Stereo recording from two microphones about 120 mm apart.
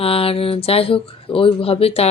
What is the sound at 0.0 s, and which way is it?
Speech, 50° left (ahead or behind).